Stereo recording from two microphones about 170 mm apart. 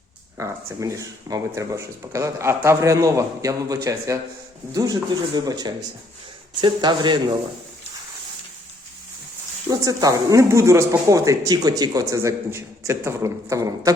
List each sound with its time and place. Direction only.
0.3 s speech: 20° right (ahead or behind)
9.6 s speech: 20° right (ahead or behind)